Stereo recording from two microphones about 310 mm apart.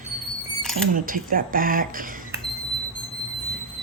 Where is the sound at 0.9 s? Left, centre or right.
Right.